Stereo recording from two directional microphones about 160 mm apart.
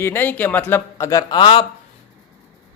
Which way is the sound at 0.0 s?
15° left (ahead or behind).